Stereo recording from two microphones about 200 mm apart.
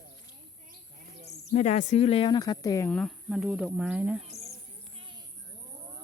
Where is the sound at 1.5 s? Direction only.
35° left (ahead or behind); by 2.9 s 15° left (ahead or behind).